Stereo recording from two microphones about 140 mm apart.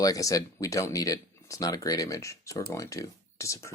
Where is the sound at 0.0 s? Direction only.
25° left (ahead or behind).